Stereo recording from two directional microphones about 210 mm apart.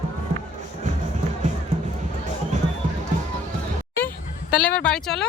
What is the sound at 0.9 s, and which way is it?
Music, 35° right (ahead or behind).